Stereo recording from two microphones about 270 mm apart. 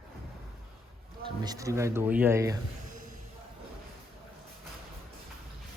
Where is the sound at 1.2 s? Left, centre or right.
Centre.